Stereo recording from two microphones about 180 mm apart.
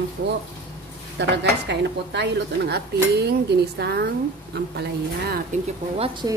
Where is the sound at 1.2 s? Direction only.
75° right (ahead or behind).